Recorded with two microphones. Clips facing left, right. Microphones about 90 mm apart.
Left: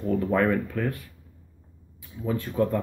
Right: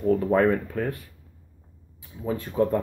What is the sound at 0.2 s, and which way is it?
Speech, 30° right (ahead or behind).